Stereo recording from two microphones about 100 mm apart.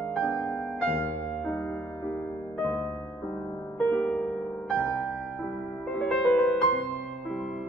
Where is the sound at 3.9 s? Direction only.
10° left (ahead or behind).